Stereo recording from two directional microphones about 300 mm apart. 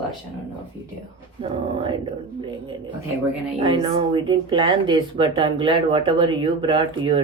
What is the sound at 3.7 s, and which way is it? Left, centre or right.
Speech, centre.